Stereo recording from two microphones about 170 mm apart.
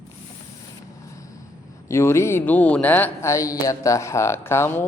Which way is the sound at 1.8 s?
15° left (ahead or behind).